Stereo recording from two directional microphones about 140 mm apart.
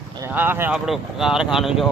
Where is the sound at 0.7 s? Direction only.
5° right (ahead or behind).